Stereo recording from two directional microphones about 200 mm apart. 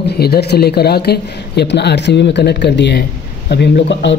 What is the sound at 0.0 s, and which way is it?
Speech, 55° left (ahead or behind).